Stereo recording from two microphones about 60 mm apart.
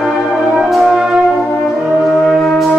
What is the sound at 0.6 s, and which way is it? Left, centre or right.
Music, centre.